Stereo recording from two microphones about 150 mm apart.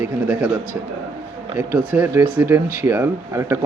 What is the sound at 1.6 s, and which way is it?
Speech, 15° right (ahead or behind).